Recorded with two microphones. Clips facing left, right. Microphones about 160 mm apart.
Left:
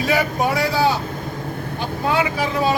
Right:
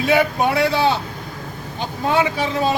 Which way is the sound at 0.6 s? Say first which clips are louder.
Right 2 dB; 25° right (ahead or behind).